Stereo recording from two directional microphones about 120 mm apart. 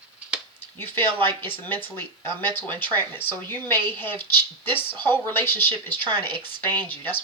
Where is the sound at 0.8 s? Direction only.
15° left (ahead or behind).